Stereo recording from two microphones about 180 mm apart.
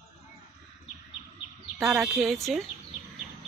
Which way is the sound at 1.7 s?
5° right (ahead or behind).